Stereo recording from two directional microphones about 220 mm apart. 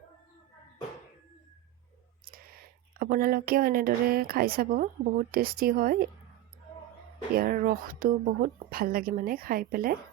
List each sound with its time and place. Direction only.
3.0 s speech: 40° right (ahead or behind)
7.3 s speech: 40° right (ahead or behind)